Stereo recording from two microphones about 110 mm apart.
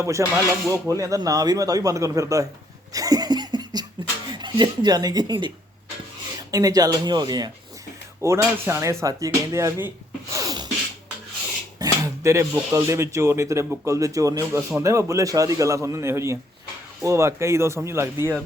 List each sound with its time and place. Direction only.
0.0 s speech: 25° right (ahead or behind)
2.9 s laughter: 35° right (ahead or behind)
4.4 s speech: 45° right (ahead or behind)
6.5 s speech: 35° right (ahead or behind)
8.2 s speech: 25° right (ahead or behind)
10.3 s sneeze: 35° right (ahead or behind)
11.8 s speech: 25° right (ahead or behind)